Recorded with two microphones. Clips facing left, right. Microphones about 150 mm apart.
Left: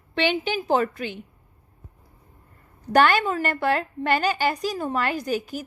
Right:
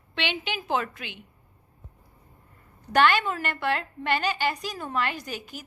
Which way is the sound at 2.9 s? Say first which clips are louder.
Left 3 dB; 40° left (ahead or behind).